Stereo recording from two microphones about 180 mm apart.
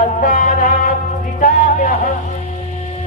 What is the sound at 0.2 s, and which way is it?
Music, 50° left (ahead or behind).